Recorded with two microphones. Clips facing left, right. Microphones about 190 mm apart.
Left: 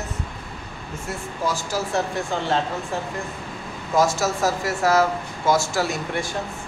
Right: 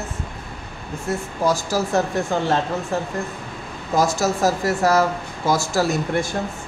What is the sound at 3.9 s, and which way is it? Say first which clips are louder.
Speech: right 1 dB; 35° right (ahead or behind).